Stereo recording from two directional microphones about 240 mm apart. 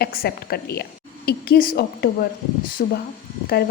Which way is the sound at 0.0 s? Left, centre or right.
Left.